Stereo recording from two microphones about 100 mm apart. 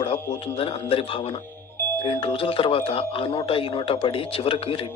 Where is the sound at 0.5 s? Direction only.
70° left (ahead or behind).